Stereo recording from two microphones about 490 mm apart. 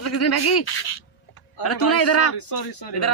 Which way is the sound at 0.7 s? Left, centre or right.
Left.